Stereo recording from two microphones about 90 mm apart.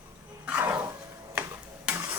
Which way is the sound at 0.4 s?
20° right (ahead or behind).